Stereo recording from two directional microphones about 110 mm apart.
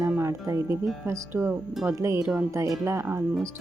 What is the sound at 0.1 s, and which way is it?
A woman's voice, 25° right (ahead or behind).